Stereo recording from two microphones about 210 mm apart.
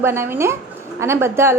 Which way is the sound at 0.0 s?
10° right (ahead or behind).